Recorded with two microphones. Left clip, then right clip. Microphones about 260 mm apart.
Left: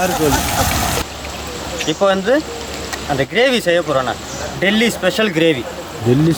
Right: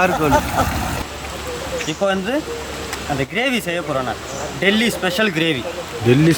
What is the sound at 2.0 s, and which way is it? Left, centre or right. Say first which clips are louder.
Speech: left 6 dB; centre.